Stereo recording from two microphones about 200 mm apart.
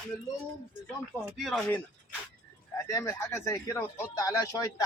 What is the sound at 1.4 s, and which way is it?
Speech, centre (ahead or behind).